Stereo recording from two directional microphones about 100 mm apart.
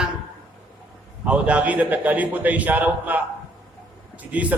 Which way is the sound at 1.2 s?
15° right (ahead or behind).